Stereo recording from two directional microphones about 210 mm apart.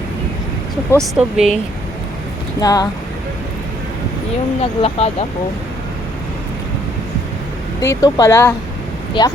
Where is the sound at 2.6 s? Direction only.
20° left (ahead or behind).